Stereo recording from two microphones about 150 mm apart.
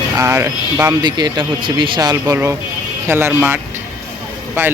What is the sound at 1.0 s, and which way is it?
Speech, 30° right (ahead or behind).